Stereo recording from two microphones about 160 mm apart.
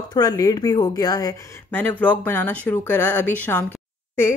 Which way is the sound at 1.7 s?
10° left (ahead or behind).